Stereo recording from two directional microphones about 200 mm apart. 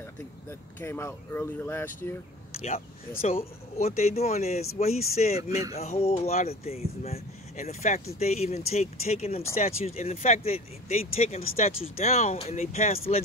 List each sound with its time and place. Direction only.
0.5 s speech: 10° left (ahead or behind)
2.5 s speech: 30° left (ahead or behind)